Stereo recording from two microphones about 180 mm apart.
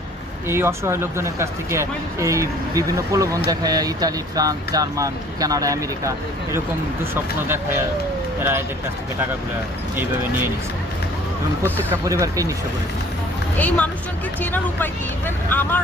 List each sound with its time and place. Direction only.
0.4 s speech: 15° right (ahead or behind)
9.9 s speech: 10° right (ahead or behind)
11.9 s speech: 20° right (ahead or behind)
13.6 s speech: 10° left (ahead or behind)